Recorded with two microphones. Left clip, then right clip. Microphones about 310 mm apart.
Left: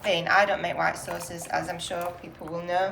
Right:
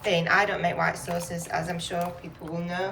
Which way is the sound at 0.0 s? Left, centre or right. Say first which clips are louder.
Left 1 dB; centre.